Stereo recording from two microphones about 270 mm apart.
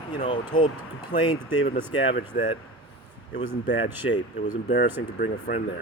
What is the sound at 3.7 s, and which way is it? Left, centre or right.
Speech, left.